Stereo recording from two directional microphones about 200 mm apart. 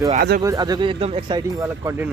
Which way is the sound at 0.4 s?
20° right (ahead or behind).